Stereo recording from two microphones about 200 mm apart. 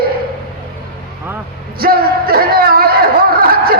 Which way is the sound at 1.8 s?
50° right (ahead or behind).